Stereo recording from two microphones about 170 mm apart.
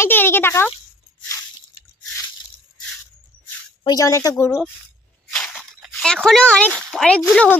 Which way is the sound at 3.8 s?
20° left (ahead or behind).